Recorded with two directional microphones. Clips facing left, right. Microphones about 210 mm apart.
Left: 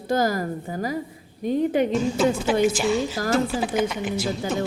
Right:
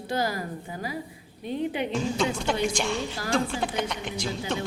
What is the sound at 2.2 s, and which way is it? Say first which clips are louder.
A woman's voice: left 8 dB; 5° left (ahead or behind).